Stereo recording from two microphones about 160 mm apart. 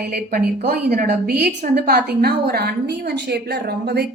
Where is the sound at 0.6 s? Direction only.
50° right (ahead or behind).